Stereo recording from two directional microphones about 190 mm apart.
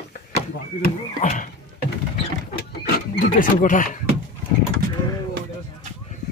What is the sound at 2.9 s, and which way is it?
Speech, 45° left (ahead or behind).